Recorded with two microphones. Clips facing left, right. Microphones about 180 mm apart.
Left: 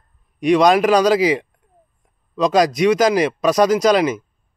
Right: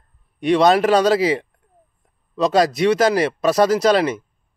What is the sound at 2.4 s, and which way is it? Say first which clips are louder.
Speech: left 1 dB; 25° right (ahead or behind).